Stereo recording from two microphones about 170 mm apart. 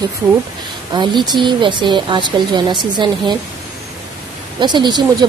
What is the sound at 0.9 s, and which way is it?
Speech, 25° right (ahead or behind).